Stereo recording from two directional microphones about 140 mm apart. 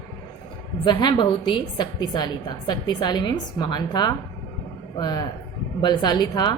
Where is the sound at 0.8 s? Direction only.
35° left (ahead or behind).